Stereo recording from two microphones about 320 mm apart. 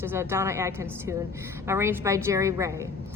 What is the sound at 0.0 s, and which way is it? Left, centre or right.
A woman's voice, centre.